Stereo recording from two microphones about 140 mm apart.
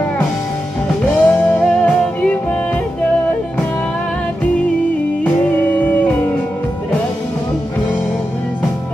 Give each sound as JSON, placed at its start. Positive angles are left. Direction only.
{"t": 1.1, "sound": "music", "side_deg": 10}
{"t": 5.8, "sound": "music", "side_deg": 10}